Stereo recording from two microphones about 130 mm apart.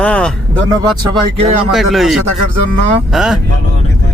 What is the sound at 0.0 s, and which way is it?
Speech, 5° left (ahead or behind).